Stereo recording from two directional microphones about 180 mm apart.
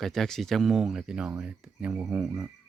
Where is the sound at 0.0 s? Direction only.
Centre (ahead or behind).